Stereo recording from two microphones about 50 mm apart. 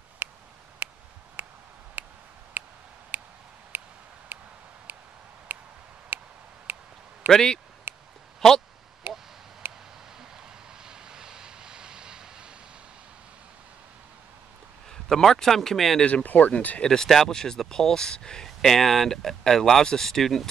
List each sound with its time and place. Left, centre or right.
0.2 s a sound: right
7.2 s speech: centre
7.9 s a sound: right
8.4 s speech: centre
9.1 s a sound: right
10.3 s vehicle: centre
14.9 s a man's voice: centre
16.1 s speech: left
16.8 s speech: centre